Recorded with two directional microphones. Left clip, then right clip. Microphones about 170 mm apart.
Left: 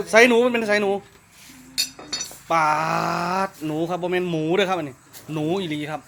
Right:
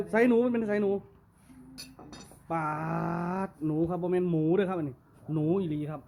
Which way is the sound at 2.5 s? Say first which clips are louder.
Left 13 dB; 10° right (ahead or behind).